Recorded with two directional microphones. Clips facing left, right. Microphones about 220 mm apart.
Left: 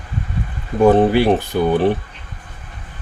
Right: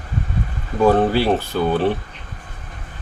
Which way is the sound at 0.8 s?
15° left (ahead or behind).